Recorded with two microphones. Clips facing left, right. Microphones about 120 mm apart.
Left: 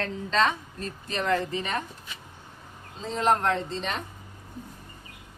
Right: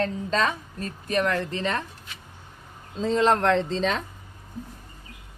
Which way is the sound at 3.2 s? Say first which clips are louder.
Right 3 dB; 90° right.